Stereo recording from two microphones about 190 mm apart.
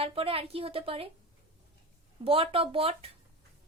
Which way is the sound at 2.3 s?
30° right (ahead or behind).